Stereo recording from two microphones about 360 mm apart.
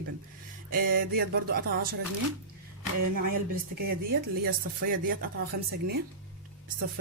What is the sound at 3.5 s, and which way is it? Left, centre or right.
Speech, right.